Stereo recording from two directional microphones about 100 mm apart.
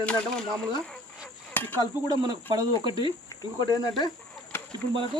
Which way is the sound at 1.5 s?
20° left (ahead or behind).